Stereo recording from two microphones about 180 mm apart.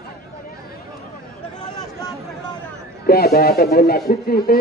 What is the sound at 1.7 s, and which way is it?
Speech, 20° left (ahead or behind).